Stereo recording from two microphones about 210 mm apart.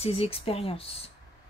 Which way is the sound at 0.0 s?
30° left (ahead or behind).